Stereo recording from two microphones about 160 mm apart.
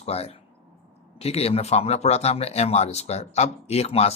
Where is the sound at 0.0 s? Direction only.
40° left (ahead or behind).